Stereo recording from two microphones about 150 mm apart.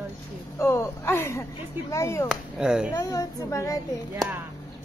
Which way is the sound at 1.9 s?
20° left (ahead or behind).